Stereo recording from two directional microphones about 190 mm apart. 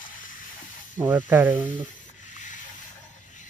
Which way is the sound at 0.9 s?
10° right (ahead or behind).